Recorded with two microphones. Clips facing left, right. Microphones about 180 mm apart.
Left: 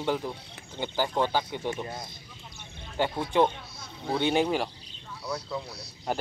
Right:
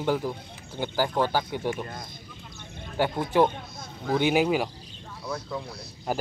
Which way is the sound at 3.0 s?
10° right (ahead or behind).